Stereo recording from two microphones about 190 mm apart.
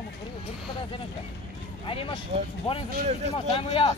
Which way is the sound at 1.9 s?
30° left (ahead or behind).